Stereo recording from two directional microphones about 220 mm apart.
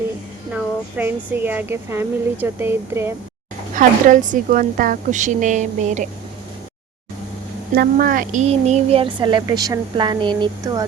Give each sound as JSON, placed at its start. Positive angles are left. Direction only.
{"t": 0.5, "sound": "speech", "side_deg": -10}
{"t": 3.8, "sound": "a woman's voice", "side_deg": -35}
{"t": 7.8, "sound": "a woman's voice", "side_deg": -40}